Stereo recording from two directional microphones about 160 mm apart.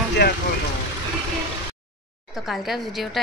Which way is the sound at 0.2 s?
90° left.